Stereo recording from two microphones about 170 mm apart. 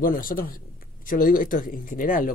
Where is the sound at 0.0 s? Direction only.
55° left (ahead or behind).